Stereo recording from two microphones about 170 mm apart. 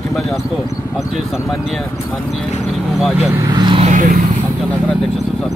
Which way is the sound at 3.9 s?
50° right (ahead or behind).